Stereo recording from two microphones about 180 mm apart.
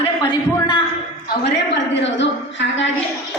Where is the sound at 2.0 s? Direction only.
90° left.